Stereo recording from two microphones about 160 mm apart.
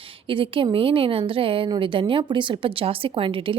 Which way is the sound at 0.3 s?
35° right (ahead or behind).